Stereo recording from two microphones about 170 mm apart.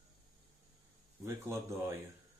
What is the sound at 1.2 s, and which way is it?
Speech, 15° right (ahead or behind).